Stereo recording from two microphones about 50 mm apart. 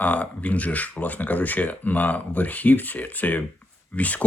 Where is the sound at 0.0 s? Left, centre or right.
Left.